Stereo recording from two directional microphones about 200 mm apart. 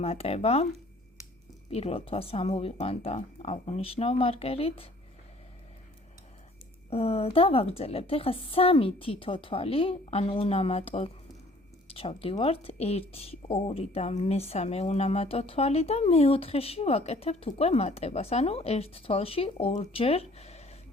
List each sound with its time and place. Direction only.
0.0 s speech: 30° left (ahead or behind)
1.7 s a woman's voice: 30° left (ahead or behind)
6.9 s a woman's voice: 30° left (ahead or behind)